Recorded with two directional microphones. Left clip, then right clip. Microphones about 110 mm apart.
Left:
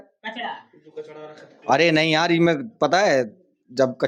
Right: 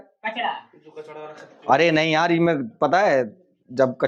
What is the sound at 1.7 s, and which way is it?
Speech, 25° left (ahead or behind).